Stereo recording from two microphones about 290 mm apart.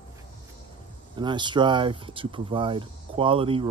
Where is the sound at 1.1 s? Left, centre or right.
Centre.